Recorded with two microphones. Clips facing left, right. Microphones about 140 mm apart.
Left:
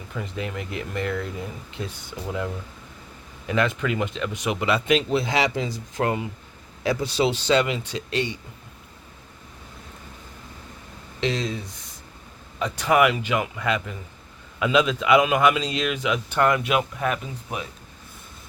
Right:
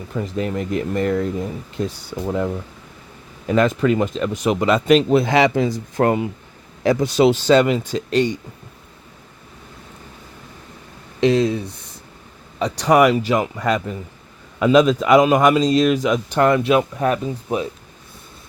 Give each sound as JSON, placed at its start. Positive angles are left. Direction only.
{"t": 0.1, "sound": "a man's voice", "side_deg": -40}
{"t": 11.2, "sound": "speech", "side_deg": -40}
{"t": 12.5, "sound": "a man's voice", "side_deg": -35}